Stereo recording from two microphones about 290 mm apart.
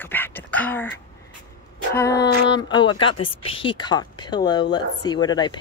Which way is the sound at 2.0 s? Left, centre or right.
Centre.